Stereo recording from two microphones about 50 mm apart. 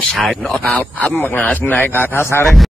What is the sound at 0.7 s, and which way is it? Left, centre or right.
A man's voice, left.